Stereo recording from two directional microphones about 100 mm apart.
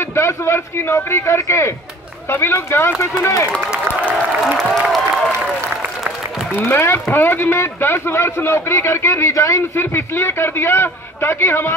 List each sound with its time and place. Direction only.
0.0 s speech: 25° left (ahead or behind)
4.6 s applause: centre (ahead or behind)
6.6 s speech: 25° left (ahead or behind)